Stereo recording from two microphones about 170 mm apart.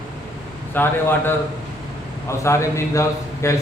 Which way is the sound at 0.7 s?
10° left (ahead or behind).